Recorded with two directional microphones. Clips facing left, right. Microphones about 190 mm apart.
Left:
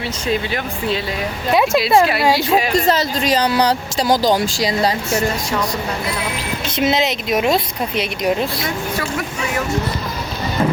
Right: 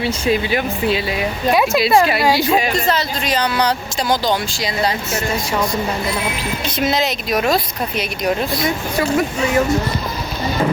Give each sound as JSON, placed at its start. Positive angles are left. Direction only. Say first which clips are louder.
{"t": 0.3, "sound": "speech", "louder": "right 2 dB", "side_deg": -5}
{"t": 1.5, "sound": "speech", "louder": "left 2 dB", "side_deg": 25}
{"t": 1.8, "sound": "speech", "louder": "even", "side_deg": 0}
{"t": 2.7, "sound": "a woman's voice", "louder": "left 3 dB", "side_deg": 40}
{"t": 6.7, "sound": "speech", "louder": "left 2 dB", "side_deg": 25}
{"t": 8.6, "sound": "speech", "louder": "right 4 dB", "side_deg": -20}